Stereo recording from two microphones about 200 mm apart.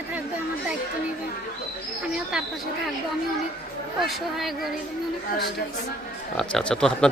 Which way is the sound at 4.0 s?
Centre (ahead or behind).